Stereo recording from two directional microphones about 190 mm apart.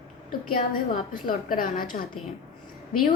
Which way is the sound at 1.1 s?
45° left (ahead or behind).